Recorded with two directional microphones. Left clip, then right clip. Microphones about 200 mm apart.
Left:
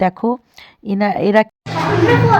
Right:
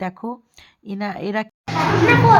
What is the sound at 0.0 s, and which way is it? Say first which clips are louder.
A woman's voice: left 11 dB; 25° left (ahead or behind).